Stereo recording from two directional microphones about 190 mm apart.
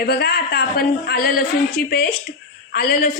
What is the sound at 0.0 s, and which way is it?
A woman's voice, 55° left (ahead or behind).